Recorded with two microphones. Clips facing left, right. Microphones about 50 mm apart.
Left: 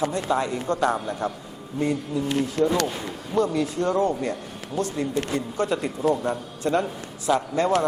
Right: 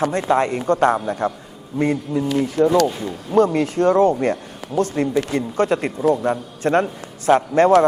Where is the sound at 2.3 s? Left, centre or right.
Right.